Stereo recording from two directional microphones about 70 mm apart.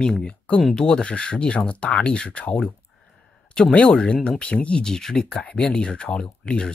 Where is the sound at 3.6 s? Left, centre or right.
Centre.